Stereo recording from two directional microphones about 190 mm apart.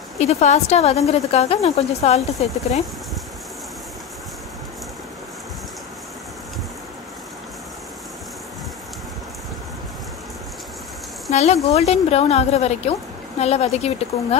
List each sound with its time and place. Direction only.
0.2 s a woman's voice: 35° left (ahead or behind)
11.2 s a woman's voice: 35° left (ahead or behind)